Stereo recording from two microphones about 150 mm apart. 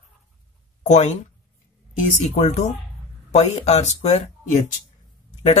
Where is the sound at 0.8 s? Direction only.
50° left (ahead or behind).